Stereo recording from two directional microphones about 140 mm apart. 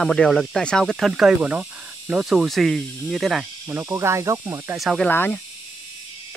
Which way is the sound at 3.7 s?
20° right (ahead or behind).